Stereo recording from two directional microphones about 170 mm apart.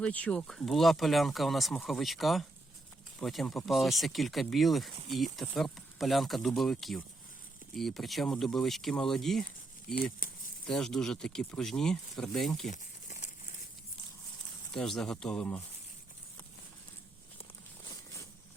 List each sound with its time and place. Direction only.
0.0 s speech: 5° left (ahead or behind)
10.7 s speech: 5° left (ahead or behind)
12.7 s crumpling: 45° left (ahead or behind)
14.7 s speech: 5° left (ahead or behind)